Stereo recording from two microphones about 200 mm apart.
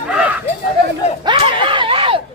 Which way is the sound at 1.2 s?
25° right (ahead or behind).